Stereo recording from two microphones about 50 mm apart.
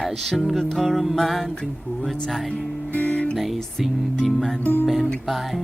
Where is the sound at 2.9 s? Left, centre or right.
Left.